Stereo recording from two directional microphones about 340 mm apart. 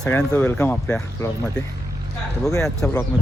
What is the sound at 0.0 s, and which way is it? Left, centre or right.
Speech, centre.